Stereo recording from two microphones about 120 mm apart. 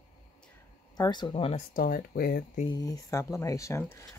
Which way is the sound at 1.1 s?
40° left (ahead or behind).